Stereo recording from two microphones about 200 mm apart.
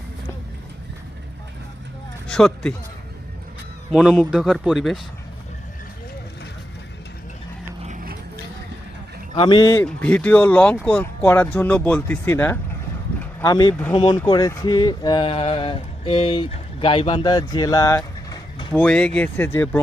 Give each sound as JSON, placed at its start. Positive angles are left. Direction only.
{"t": 2.2, "sound": "speech", "side_deg": 5}
{"t": 3.9, "sound": "speech", "side_deg": 0}
{"t": 7.8, "sound": "vehicle", "side_deg": -40}
{"t": 9.3, "sound": "speech", "side_deg": 25}
{"t": 9.8, "sound": "speech", "side_deg": 5}
{"t": 18.7, "sound": "speech", "side_deg": 5}